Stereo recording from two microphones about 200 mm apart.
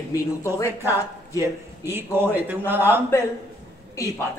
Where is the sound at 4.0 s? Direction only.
15° left (ahead or behind).